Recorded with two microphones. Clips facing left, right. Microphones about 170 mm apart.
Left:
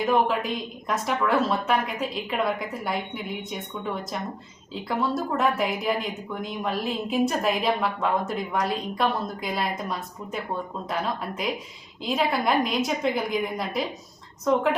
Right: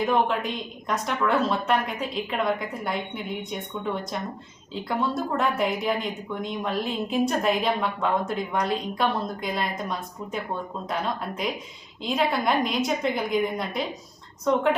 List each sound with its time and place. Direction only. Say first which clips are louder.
0.0 s speech: left 1 dB; centre (ahead or behind)